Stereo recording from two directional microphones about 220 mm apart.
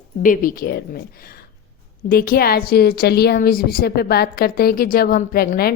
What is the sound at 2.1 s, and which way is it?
A woman's voice, 45° left (ahead or behind).